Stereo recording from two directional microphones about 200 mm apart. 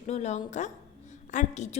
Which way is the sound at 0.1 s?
35° left (ahead or behind).